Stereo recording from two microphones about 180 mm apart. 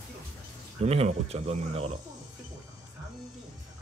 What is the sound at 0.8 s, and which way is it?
Speech, 35° right (ahead or behind).